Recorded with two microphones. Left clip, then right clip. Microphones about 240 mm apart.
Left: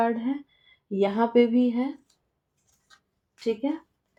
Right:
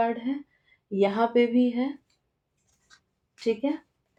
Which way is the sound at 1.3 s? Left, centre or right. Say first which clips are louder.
Left 2 dB; left.